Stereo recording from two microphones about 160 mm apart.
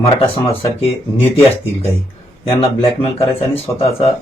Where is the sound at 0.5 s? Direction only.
40° left (ahead or behind).